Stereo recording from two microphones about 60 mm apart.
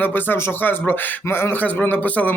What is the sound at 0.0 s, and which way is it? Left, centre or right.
A man's voice, left.